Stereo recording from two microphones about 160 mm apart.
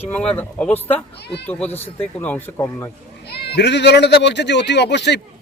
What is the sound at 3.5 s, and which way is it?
Speech, 90° left.